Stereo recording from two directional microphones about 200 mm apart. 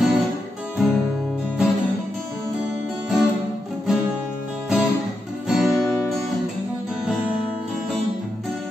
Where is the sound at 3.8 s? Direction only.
5° right (ahead or behind).